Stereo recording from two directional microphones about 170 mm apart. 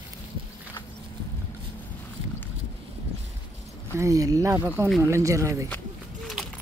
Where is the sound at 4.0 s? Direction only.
20° right (ahead or behind).